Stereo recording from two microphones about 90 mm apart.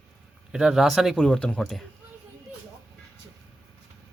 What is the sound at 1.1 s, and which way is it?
Speech, 10° left (ahead or behind).